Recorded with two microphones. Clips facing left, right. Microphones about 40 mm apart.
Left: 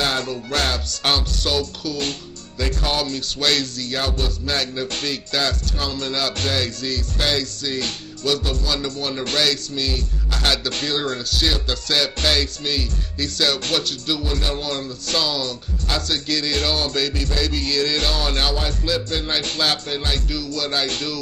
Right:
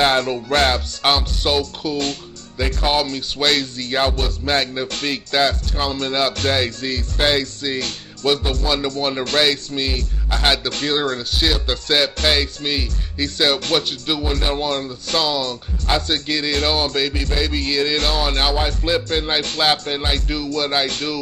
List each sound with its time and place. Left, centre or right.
0.3 s a man's voice: right